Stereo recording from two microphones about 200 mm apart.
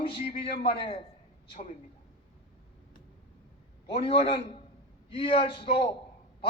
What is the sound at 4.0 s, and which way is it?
A man's voice, 25° left (ahead or behind).